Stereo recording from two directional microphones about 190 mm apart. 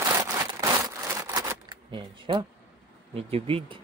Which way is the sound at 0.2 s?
20° right (ahead or behind).